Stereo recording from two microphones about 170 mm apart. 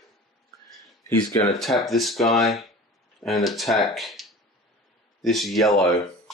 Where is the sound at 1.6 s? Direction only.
Centre (ahead or behind).